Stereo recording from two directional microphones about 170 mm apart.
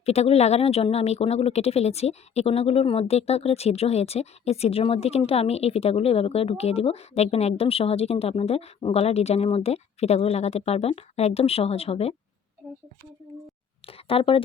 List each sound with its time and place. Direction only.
0.0 s a woman's voice: 40° left (ahead or behind)
13.8 s speech: 35° left (ahead or behind)